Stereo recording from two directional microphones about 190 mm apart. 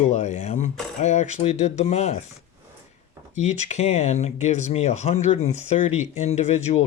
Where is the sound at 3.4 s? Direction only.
40° left (ahead or behind).